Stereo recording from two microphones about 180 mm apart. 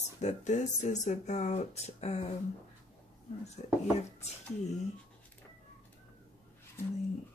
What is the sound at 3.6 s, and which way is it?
Speech, 45° left (ahead or behind).